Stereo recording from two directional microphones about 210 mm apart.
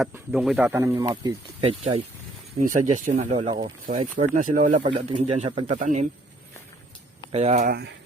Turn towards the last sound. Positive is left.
turn(degrees=-45)  # may be behind; listen again after turning